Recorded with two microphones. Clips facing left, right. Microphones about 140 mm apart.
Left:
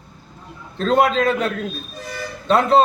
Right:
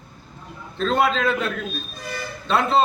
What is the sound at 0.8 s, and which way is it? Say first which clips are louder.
A man's voice: left 4 dB; 45° left (ahead or behind).